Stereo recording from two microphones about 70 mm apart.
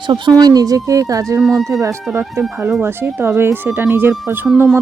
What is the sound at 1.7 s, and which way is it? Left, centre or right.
Speech, right.